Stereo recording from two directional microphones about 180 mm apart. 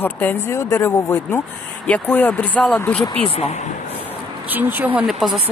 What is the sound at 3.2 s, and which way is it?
Speech, 35° left (ahead or behind).